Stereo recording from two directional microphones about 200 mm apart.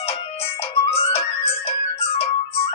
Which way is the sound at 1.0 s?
30° left (ahead or behind).